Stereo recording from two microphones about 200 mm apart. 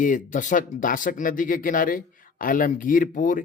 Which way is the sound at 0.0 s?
40° left (ahead or behind).